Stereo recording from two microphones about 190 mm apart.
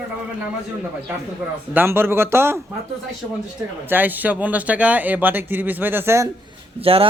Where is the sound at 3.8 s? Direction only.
10° right (ahead or behind).